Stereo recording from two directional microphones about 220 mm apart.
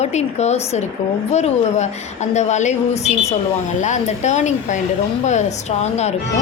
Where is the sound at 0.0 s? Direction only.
30° left (ahead or behind).